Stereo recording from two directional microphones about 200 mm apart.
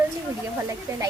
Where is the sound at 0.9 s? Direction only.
15° right (ahead or behind).